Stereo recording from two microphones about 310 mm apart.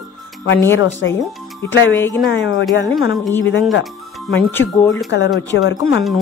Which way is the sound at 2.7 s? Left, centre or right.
Left.